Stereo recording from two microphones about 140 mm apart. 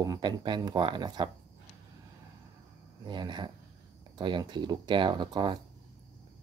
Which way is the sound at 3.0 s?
30° right (ahead or behind).